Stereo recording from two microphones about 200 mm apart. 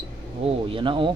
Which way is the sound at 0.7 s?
25° right (ahead or behind).